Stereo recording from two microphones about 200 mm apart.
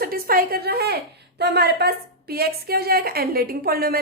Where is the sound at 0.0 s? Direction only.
45° right (ahead or behind).